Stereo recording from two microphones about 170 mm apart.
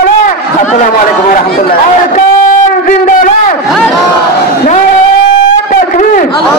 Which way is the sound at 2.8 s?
50° left (ahead or behind).